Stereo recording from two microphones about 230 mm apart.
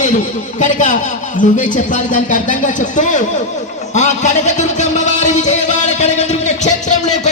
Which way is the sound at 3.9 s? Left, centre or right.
Left.